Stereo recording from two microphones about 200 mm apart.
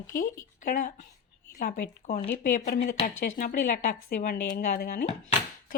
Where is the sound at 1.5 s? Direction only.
50° left (ahead or behind).